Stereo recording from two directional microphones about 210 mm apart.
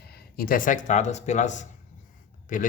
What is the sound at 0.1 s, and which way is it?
A man's voice, 45° left (ahead or behind).